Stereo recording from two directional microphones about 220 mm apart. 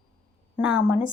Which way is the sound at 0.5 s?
5° right (ahead or behind).